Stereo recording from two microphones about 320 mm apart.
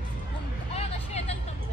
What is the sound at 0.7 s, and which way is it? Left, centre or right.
Hubbub, centre.